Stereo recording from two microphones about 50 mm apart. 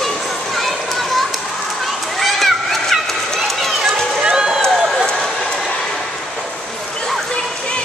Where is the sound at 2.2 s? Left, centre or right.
Centre.